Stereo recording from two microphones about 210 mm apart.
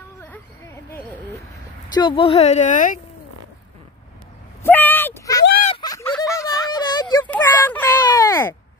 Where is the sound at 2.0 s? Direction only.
25° left (ahead or behind).